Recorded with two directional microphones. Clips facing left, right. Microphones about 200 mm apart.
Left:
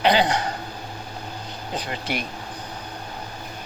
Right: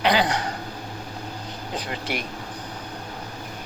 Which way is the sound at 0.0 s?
25° left (ahead or behind).